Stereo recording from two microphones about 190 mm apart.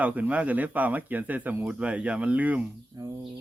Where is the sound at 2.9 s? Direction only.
20° right (ahead or behind).